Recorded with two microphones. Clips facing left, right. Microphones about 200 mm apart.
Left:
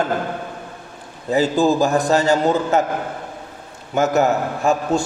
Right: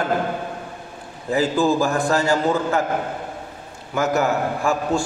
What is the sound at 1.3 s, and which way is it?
A man's voice, 20° left (ahead or behind).